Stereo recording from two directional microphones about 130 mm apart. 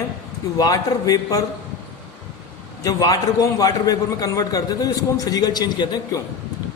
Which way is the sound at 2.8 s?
30° left (ahead or behind).